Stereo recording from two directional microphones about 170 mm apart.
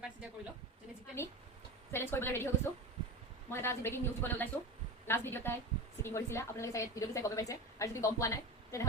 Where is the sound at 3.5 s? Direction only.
15° left (ahead or behind).